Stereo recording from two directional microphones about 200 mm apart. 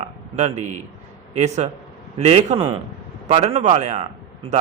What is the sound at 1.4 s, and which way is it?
A man's voice, 35° right (ahead or behind).